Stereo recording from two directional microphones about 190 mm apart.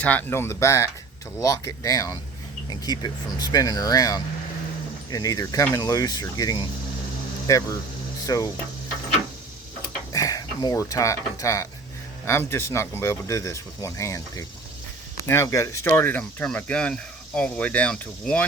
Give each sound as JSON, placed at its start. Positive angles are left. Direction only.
{"t": 0.0, "sound": "speech", "side_deg": 10}
{"t": 10.1, "sound": "speech", "side_deg": 20}